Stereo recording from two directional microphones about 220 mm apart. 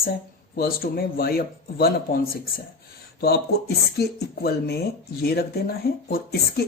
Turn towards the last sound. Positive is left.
turn(degrees=45)  # may be behind; listen again after turning